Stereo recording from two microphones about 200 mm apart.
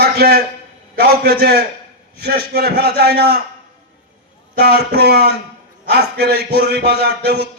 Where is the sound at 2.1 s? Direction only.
55° right (ahead or behind).